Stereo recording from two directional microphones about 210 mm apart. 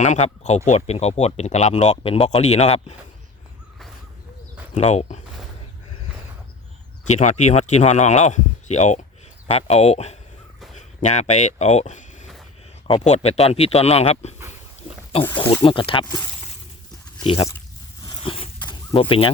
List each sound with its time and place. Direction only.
0.0 s speech: 35° left (ahead or behind)
4.7 s speech: 35° left (ahead or behind)
7.1 s speech: 35° left (ahead or behind)
15.4 s speech: 25° left (ahead or behind)
17.2 s speech: 25° left (ahead or behind)
18.0 s a sound: 25° left (ahead or behind)